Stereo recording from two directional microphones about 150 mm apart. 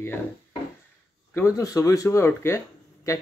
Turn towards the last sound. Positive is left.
turn(degrees=20)  # may be behind; listen again after turning